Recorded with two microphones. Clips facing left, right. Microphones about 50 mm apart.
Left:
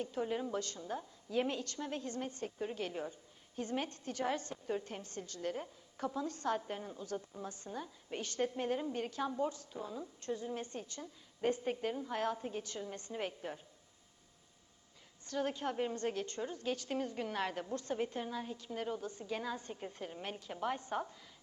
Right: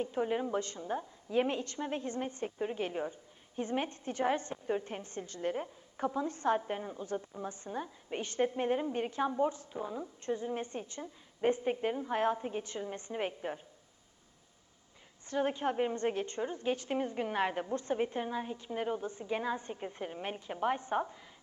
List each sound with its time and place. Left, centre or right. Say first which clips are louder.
0.0 s a woman's voice: right 4 dB; right
15.3 s a woman's voice: right 5 dB; right